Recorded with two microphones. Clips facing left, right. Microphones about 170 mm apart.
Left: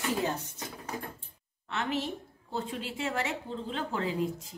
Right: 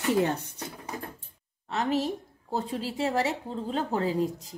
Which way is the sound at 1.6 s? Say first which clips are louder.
Right 5 dB; 35° right (ahead or behind).